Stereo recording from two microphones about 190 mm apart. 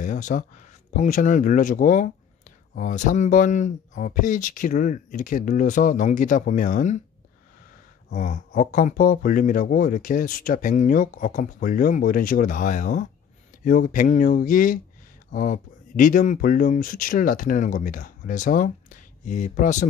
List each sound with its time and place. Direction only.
0.0 s a sound: 40° left (ahead or behind)
0.9 s speech: 40° left (ahead or behind)
8.1 s speech: 40° left (ahead or behind)